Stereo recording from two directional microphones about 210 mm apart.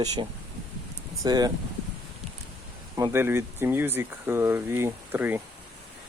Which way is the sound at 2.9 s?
15° right (ahead or behind).